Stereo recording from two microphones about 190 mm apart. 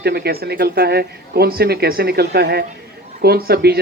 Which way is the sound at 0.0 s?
60° right (ahead or behind).